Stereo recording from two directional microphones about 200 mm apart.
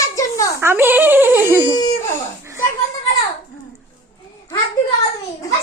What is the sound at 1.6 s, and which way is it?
Baby cry, 20° left (ahead or behind).